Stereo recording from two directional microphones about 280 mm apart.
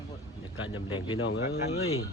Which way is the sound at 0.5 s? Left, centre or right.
Left.